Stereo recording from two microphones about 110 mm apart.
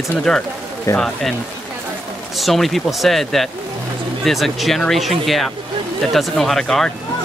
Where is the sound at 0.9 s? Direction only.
30° left (ahead or behind).